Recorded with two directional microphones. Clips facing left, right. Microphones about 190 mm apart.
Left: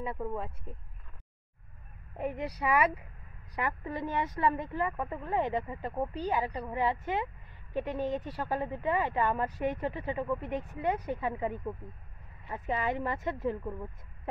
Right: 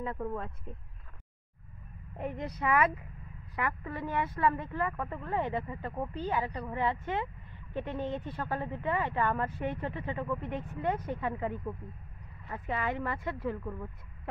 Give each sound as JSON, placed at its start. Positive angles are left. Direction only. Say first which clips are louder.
{"t": 0.0, "sound": "speech", "louder": "even", "side_deg": 10}
{"t": 2.1, "sound": "speech", "louder": "left 2 dB", "side_deg": 10}